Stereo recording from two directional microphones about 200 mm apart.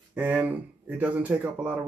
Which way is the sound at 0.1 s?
5° right (ahead or behind).